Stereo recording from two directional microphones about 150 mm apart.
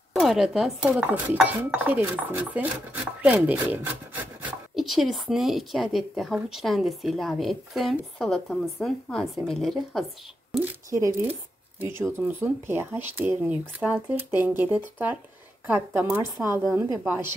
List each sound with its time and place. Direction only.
0.1 s speech: centre (ahead or behind)
4.7 s a woman's voice: centre (ahead or behind)
10.6 s speech: 15° right (ahead or behind)